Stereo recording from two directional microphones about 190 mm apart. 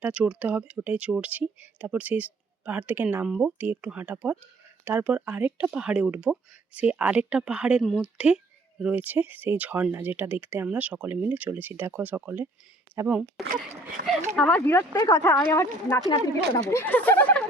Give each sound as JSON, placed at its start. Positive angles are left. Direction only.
{"t": 0.0, "sound": "speech", "side_deg": -5}
{"t": 14.0, "sound": "speech", "side_deg": -50}
{"t": 14.3, "sound": "speech", "side_deg": 5}